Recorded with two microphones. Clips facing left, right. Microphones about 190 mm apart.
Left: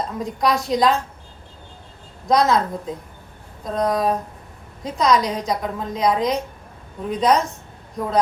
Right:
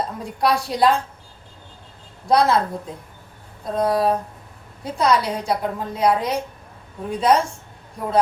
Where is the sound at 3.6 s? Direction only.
10° right (ahead or behind).